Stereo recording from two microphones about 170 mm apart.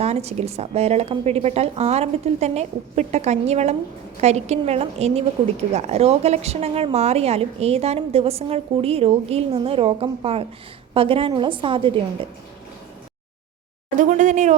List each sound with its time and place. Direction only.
0.0 s a woman's voice: 40° right (ahead or behind)
14.1 s speech: 45° right (ahead or behind)